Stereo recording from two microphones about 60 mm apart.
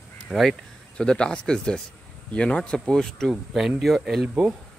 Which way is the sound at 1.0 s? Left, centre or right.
Centre.